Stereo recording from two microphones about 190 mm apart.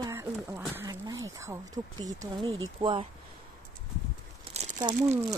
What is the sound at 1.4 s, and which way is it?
Speech, 15° right (ahead or behind).